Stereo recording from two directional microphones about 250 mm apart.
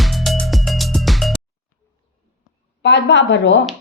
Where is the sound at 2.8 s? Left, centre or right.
Left.